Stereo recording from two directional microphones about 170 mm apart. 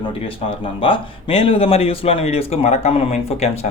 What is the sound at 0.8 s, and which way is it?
Speech, 30° left (ahead or behind).